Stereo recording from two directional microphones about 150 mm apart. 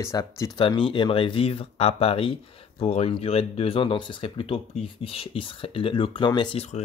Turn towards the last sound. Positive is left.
turn(degrees=30)  # may be behind; listen again after turning